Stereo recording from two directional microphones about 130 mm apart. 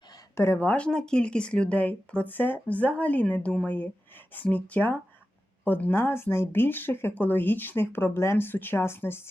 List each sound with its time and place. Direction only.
0.3 s speech: 20° left (ahead or behind)